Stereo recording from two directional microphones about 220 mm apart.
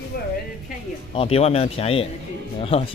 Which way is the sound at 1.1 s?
25° left (ahead or behind).